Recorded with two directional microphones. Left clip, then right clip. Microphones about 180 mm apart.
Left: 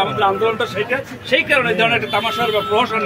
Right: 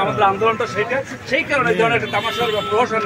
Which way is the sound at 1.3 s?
65° left (ahead or behind).